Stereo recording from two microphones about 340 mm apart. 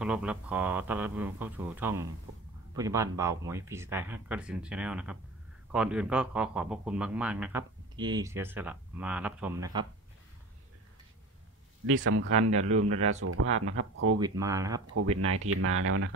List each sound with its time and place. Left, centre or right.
0.0 s a man's voice: centre
11.8 s speech: right
14.1 s speech: centre
15.1 s speech: right